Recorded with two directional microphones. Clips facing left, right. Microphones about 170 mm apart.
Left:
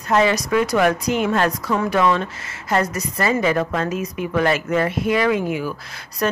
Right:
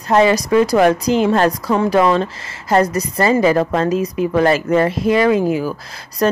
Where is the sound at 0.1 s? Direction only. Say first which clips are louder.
Right 5 dB; 30° right (ahead or behind).